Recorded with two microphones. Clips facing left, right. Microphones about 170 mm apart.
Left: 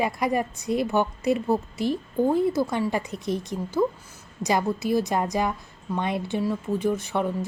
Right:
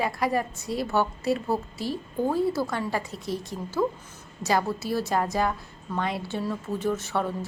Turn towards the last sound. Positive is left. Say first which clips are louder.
# left 2 dB
turn(degrees=15)  # may be behind; listen again after turning